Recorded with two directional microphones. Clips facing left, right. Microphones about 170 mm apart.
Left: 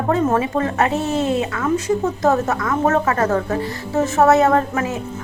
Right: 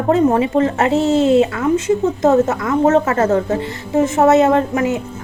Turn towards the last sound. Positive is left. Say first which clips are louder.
# right 3 dB
turn(degrees=-20)  # may be behind; listen again after turning